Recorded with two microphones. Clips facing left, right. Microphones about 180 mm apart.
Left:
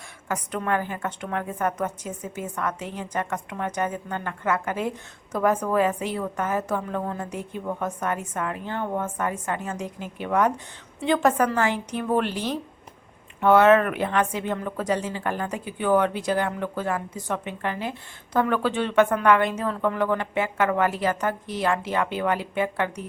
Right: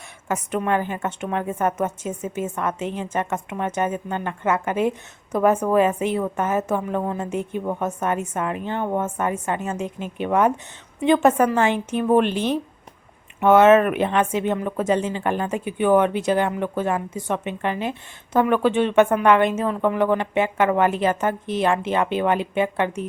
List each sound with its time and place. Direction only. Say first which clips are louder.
0.3 s a woman's voice: right 4 dB; 20° right (ahead or behind)